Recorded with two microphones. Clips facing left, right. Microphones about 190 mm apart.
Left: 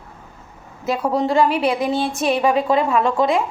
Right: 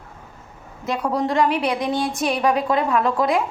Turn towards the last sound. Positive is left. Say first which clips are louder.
# left 2 dB
turn(degrees=0)  # may be behind; listen again after turning